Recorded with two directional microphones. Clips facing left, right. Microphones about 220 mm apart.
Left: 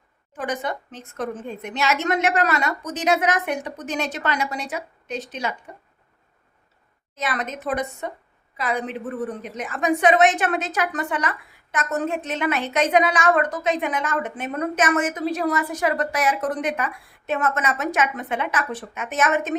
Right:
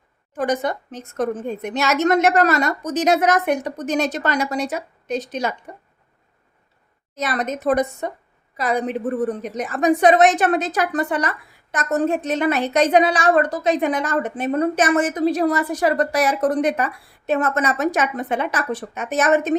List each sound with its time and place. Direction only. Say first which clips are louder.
0.3 s a woman's voice: right 6 dB; 40° right (ahead or behind)
7.2 s a woman's voice: right 4 dB; 40° right (ahead or behind)